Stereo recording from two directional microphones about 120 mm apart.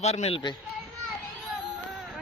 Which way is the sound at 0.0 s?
65° left (ahead or behind).